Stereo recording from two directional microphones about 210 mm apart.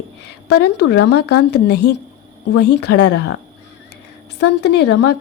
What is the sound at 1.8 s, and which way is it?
A woman's voice, 55° left (ahead or behind).